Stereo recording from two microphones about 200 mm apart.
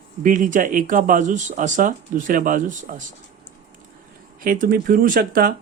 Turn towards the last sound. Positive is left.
turn(degrees=-45)  # may be behind; listen again after turning